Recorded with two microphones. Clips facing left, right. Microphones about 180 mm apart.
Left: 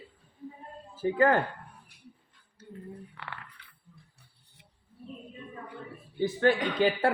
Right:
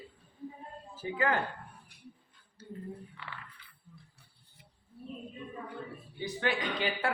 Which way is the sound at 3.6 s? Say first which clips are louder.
Left 2 dB; 70° left (ahead or behind).